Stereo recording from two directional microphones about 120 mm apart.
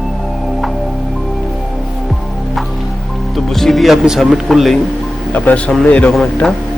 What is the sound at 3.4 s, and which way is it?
Speech, centre (ahead or behind).